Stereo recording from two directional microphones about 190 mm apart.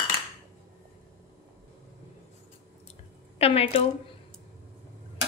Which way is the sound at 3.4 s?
30° left (ahead or behind).